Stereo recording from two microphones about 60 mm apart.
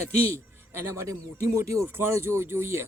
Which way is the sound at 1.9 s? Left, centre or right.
Right.